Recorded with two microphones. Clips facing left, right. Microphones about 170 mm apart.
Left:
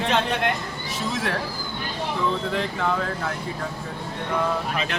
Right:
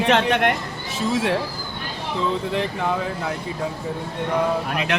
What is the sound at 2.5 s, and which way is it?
Speech, 15° right (ahead or behind).